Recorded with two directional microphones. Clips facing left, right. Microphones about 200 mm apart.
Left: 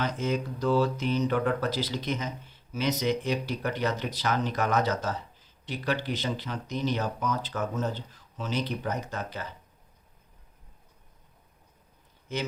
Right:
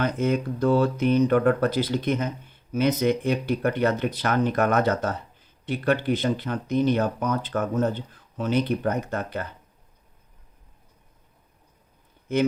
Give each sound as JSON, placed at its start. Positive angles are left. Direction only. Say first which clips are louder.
{"t": 0.0, "sound": "speech", "louder": "right 5 dB", "side_deg": -55}
{"t": 12.3, "sound": "speech", "louder": "right 10 dB", "side_deg": -55}